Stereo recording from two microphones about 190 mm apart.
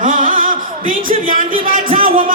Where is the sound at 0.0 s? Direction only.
45° right (ahead or behind).